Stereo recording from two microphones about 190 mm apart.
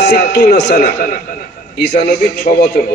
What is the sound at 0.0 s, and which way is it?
A man's voice, 55° left (ahead or behind).